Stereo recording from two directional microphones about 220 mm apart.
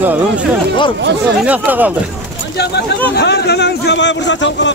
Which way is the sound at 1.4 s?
5° right (ahead or behind).